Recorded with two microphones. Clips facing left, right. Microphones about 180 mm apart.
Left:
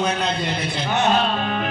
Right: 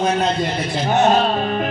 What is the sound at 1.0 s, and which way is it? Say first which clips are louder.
Speech: right 4 dB; 45° right (ahead or behind).